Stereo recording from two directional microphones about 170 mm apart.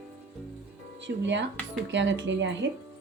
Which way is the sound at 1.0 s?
90° right.